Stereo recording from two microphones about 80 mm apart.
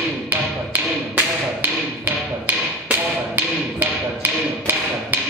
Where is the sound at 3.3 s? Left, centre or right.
Right.